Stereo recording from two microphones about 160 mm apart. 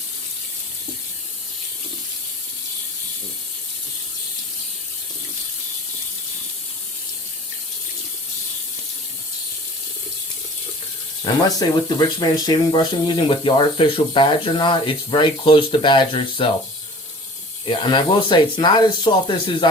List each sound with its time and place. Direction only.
11.2 s speech: 25° left (ahead or behind)
17.7 s speech: 30° left (ahead or behind)